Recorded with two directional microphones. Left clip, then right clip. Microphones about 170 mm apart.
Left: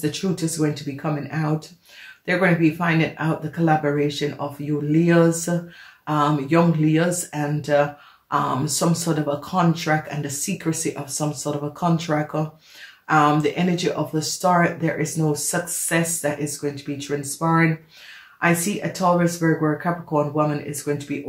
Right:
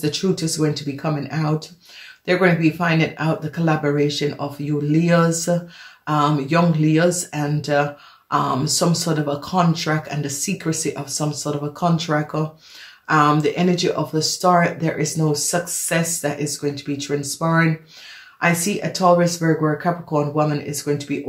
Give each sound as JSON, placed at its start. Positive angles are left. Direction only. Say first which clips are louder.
{"t": 0.0, "sound": "speech", "louder": "right 3 dB", "side_deg": -30}
{"t": 2.2, "sound": "speech", "louder": "right 2 dB", "side_deg": -30}